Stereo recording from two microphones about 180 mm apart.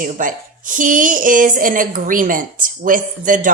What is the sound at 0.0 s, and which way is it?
A woman's voice, 50° right (ahead or behind).